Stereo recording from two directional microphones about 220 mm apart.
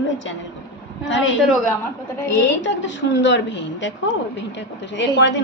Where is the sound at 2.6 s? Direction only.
55° left (ahead or behind).